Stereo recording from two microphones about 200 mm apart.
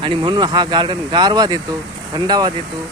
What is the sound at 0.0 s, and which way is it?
Speech, 25° right (ahead or behind).